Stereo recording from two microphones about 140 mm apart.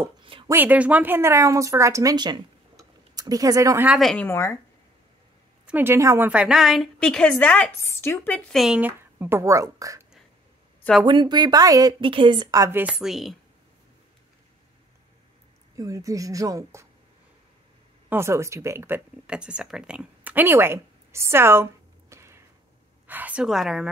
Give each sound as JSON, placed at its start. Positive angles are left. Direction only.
{"t": 0.2, "sound": "a sound", "side_deg": -40}
{"t": 0.5, "sound": "speech", "side_deg": -15}
{"t": 2.8, "sound": "a sound", "side_deg": -25}
{"t": 4.0, "sound": "a woman's voice", "side_deg": 5}
{"t": 4.3, "sound": "speech", "side_deg": 20}
{"t": 5.7, "sound": "a woman's voice", "side_deg": -15}
{"t": 8.5, "sound": "speech", "side_deg": -5}
{"t": 11.1, "sound": "speech", "side_deg": -35}
{"t": 12.8, "sound": "a woman's voice", "side_deg": -5}
{"t": 15.7, "sound": "speech", "side_deg": -25}
{"t": 18.1, "sound": "speech", "side_deg": -20}
{"t": 22.1, "sound": "a sound", "side_deg": -20}
{"t": 23.0, "sound": "a woman's voice", "side_deg": -10}